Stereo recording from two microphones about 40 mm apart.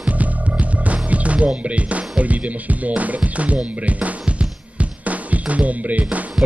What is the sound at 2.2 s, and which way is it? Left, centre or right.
Speech, right.